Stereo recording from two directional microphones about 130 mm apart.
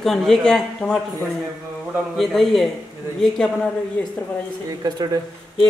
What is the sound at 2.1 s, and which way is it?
Speech, centre (ahead or behind).